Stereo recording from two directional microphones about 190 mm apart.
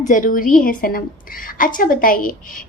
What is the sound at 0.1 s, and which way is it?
A woman's voice, 45° left (ahead or behind).